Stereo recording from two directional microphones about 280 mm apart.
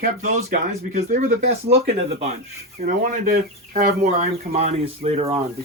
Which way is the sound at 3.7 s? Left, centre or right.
Right.